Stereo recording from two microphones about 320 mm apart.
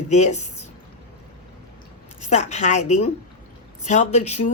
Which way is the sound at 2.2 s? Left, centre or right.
Left.